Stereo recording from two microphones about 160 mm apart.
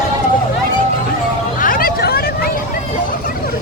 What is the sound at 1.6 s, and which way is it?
Hubbub, 60° left (ahead or behind).